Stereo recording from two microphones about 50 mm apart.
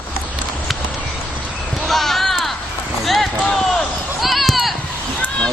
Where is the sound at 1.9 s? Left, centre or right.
Centre.